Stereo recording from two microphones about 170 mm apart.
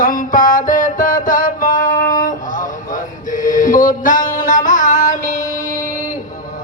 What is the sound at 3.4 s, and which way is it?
Music, 50° left (ahead or behind).